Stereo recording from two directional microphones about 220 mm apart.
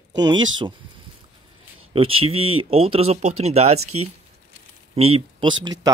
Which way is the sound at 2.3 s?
70° right (ahead or behind).